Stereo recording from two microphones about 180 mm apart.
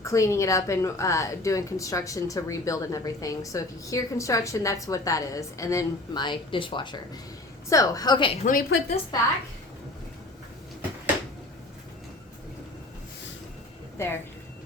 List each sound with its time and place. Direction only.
0.0 s a woman's voice: 15° left (ahead or behind)
8.4 s a woman's voice: 50° left (ahead or behind)